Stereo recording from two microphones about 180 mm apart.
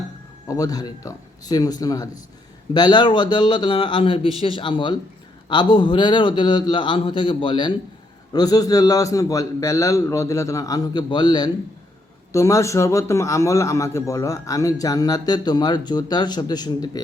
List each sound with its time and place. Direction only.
0.4 s a man's voice: 20° left (ahead or behind)